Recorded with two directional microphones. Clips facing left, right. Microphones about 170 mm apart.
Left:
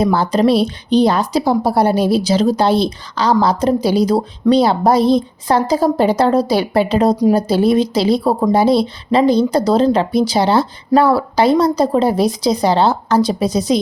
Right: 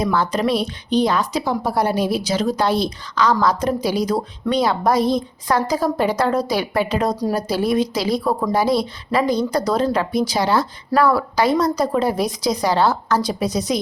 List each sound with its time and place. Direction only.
0.0 s a woman's voice: 30° left (ahead or behind)
7.2 s a woman's voice: 15° left (ahead or behind)
7.4 s a woman's voice: 25° left (ahead or behind)